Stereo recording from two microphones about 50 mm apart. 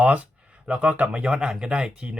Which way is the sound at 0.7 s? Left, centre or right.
Right.